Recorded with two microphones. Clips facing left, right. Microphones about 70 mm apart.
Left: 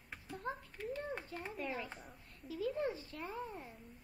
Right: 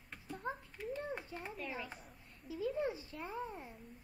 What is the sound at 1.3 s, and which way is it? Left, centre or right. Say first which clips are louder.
Speech: left 2 dB; centre.